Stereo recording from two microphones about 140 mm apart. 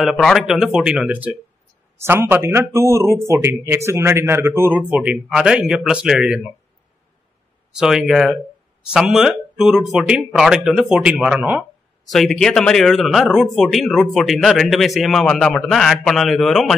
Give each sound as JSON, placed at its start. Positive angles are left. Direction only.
{"t": 0.0, "sound": "speech", "side_deg": 0}
{"t": 7.7, "sound": "speech", "side_deg": -5}
{"t": 12.1, "sound": "speech", "side_deg": 0}